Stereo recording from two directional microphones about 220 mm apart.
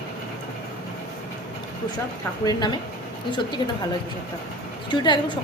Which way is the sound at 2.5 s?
20° left (ahead or behind).